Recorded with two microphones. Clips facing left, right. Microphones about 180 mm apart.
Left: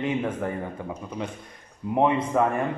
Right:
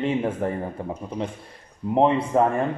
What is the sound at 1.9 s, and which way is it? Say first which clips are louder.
Speech: right 3 dB; 30° right (ahead or behind).